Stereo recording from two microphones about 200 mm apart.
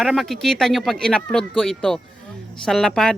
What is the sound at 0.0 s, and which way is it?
Speech, centre (ahead or behind).